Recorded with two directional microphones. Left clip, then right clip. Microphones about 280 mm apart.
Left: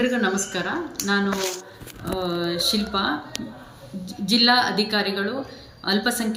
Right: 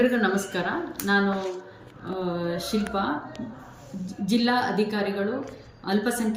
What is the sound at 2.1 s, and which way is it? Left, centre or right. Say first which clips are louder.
Speech: left 4 dB; centre.